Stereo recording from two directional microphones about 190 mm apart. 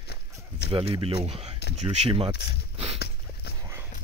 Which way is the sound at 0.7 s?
25° right (ahead or behind).